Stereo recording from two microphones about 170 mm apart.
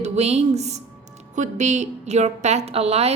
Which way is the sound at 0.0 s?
40° right (ahead or behind).